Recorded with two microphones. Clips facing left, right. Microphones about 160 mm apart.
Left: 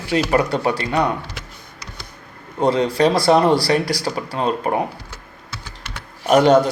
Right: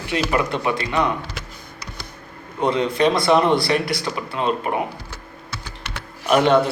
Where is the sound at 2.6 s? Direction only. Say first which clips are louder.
Left 3 dB; 35° left (ahead or behind).